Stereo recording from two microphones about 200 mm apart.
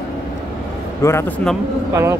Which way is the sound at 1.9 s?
15° right (ahead or behind).